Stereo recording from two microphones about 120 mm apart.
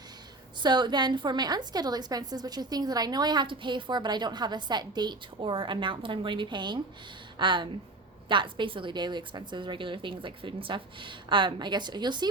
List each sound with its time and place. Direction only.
0.6 s a woman's voice: 40° right (ahead or behind)